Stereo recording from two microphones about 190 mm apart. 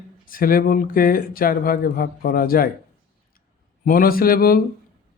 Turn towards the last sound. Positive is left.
turn(degrees=50)  # may be behind; listen again after turning